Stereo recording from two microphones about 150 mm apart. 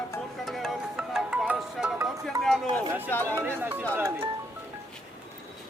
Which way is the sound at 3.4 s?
15° right (ahead or behind).